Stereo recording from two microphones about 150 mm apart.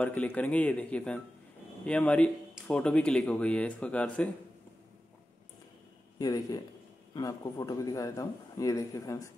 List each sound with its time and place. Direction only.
0.0 s speech: 10° left (ahead or behind)
6.1 s a man's voice: 25° left (ahead or behind)